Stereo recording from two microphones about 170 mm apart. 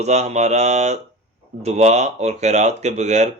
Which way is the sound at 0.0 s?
40° right (ahead or behind).